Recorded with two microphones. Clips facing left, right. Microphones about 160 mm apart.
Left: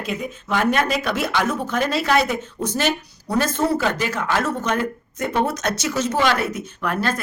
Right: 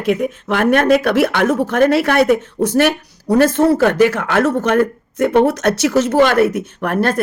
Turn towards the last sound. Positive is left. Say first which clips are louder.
# right 7 dB
turn(degrees=-60)  # may be behind; listen again after turning